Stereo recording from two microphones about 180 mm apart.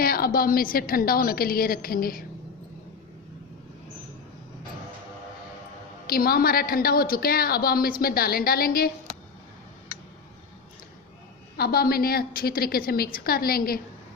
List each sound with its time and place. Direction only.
0.0 s a woman's voice: 55° left (ahead or behind)
6.1 s a woman's voice: 55° left (ahead or behind)
11.5 s a woman's voice: 60° left (ahead or behind)